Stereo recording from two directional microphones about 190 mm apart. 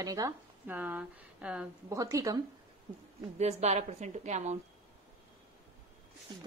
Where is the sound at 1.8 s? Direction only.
15° right (ahead or behind).